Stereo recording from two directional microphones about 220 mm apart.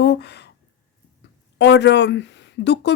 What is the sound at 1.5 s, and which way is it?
A woman's voice, 50° left (ahead or behind).